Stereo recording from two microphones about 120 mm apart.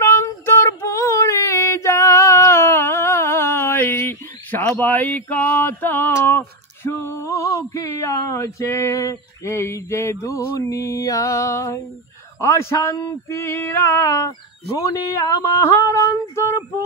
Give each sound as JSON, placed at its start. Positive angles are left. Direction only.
{"t": 0.0, "sound": "female singing", "side_deg": 20}
{"t": 12.4, "sound": "a sound", "side_deg": 20}
{"t": 16.0, "sound": "female singing", "side_deg": 25}